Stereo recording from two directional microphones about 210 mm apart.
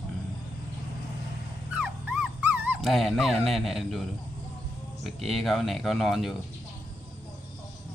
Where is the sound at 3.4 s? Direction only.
Centre (ahead or behind).